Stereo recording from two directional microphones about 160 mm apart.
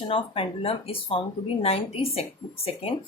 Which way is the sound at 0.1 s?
35° left (ahead or behind).